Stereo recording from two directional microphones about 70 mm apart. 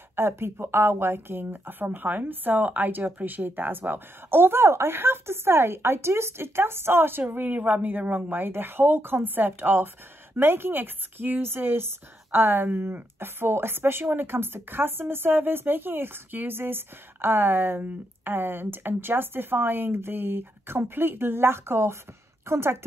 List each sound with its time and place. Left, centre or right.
0.1 s speech: right